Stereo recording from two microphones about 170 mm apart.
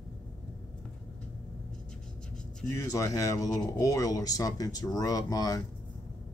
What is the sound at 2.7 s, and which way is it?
Speech, 20° left (ahead or behind).